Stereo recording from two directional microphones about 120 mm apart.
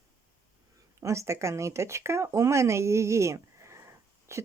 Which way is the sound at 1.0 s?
25° right (ahead or behind).